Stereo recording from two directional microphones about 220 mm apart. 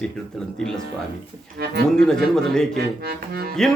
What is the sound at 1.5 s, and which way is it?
Speech, 45° right (ahead or behind).